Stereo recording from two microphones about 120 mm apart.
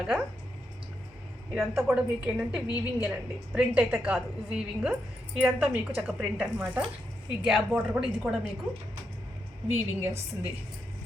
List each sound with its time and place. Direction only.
0.0 s a woman's voice: 5° right (ahead or behind)
1.5 s a woman's voice: centre (ahead or behind)
9.6 s a woman's voice: 20° right (ahead or behind)